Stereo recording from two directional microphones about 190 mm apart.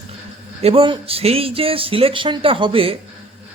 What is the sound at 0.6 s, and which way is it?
Speech, 30° right (ahead or behind).